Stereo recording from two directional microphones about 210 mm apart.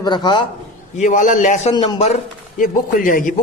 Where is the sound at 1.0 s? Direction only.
35° left (ahead or behind).